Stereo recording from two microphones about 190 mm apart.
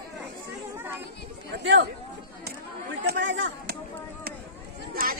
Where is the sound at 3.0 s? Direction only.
65° right (ahead or behind).